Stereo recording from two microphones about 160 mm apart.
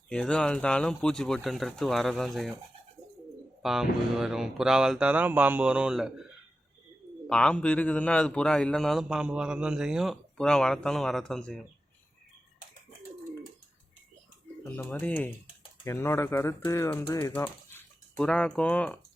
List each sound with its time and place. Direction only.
0.1 s a man's voice: 5° left (ahead or behind)
3.6 s a man's voice: 5° right (ahead or behind)
7.3 s a man's voice: 5° left (ahead or behind)
14.6 s a man's voice: 15° left (ahead or behind)